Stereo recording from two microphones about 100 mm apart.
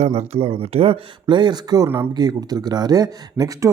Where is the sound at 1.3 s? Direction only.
50° right (ahead or behind).